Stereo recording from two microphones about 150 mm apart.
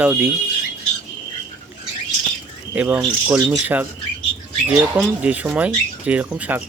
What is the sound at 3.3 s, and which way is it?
Speech, 20° right (ahead or behind).